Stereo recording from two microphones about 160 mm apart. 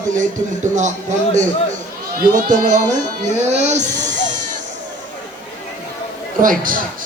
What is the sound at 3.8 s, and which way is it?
Speech, 90° right.